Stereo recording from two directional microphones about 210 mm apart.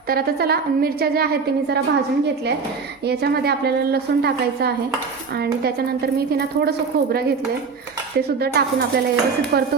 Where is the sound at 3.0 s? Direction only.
50° right (ahead or behind).